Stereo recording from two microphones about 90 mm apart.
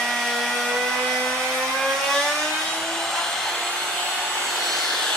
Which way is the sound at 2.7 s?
5° left (ahead or behind).